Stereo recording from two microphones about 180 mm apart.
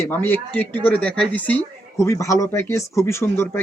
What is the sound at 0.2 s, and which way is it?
Speech, 10° left (ahead or behind).